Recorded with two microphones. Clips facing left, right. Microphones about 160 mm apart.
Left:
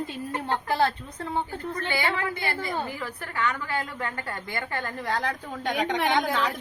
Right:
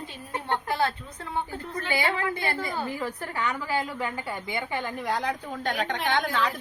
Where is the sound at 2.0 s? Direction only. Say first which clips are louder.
Right 2 dB; 20° right (ahead or behind).